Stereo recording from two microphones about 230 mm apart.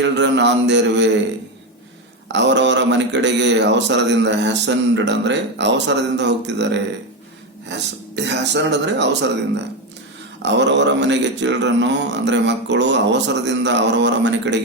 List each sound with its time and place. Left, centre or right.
0.0 s speech: right
2.3 s speech: right
10.4 s speech: right